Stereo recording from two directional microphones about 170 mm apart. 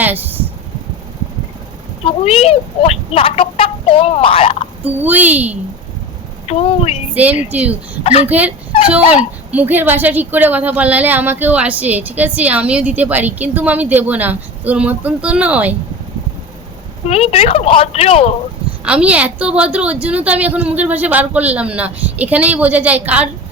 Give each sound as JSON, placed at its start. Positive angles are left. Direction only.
{"t": 0.0, "sound": "a sound", "side_deg": -10}
{"t": 2.2, "sound": "speech", "side_deg": 35}
{"t": 4.8, "sound": "a woman's voice", "side_deg": -10}
{"t": 6.5, "sound": "a woman's voice", "side_deg": 35}
{"t": 7.1, "sound": "a woman's voice", "side_deg": -10}
{"t": 8.0, "sound": "a woman's voice", "side_deg": 40}
{"t": 8.3, "sound": "a woman's voice", "side_deg": -10}
{"t": 17.1, "sound": "a woman's voice", "side_deg": 35}
{"t": 18.9, "sound": "a woman's voice", "side_deg": -5}